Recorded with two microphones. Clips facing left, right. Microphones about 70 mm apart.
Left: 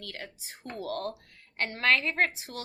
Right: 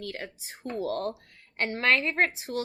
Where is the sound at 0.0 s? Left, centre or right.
Right.